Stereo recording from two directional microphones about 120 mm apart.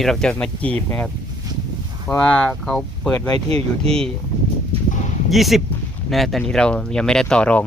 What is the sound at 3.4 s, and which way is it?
Speech, 55° right (ahead or behind).